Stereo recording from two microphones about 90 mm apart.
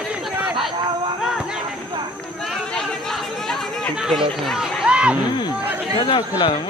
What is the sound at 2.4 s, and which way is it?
Chatter, 5° left (ahead or behind).